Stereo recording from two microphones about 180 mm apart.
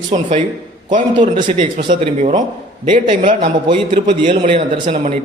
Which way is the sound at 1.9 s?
45° right (ahead or behind).